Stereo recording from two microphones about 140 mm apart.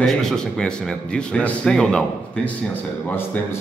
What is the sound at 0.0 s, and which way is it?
Speech, 5° left (ahead or behind).